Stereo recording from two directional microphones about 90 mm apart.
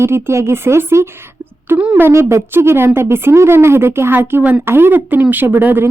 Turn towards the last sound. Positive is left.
turn(degrees=-20)  # may be behind; listen again after turning